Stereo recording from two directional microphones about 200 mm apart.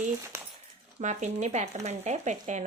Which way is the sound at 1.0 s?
35° right (ahead or behind).